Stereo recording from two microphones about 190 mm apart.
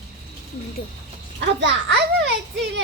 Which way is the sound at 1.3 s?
65° right (ahead or behind).